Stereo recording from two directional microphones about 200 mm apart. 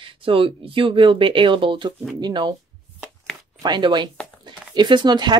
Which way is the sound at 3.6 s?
20° right (ahead or behind).